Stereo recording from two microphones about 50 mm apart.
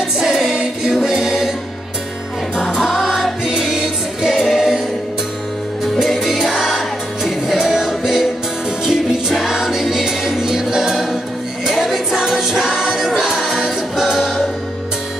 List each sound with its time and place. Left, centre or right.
0.2 s music: centre
2.5 s music: centre
5.9 s music: centre